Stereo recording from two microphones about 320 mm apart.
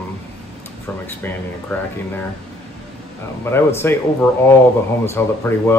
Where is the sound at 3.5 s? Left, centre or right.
Centre.